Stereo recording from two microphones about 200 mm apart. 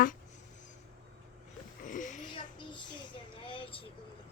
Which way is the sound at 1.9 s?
40° left (ahead or behind).